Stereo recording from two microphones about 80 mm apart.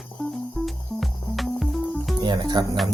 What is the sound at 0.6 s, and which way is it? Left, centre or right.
Music, centre.